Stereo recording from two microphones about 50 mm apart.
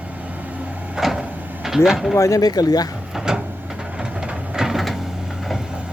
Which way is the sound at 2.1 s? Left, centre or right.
Left.